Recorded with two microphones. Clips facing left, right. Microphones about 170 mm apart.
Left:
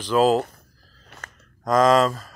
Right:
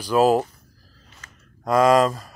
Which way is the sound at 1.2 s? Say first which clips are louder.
Left 7 dB; 60° left (ahead or behind).